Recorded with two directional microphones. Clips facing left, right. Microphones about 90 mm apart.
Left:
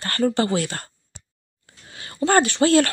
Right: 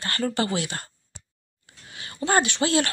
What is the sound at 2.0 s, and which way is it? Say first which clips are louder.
Speech: left 4 dB; 40° left (ahead or behind).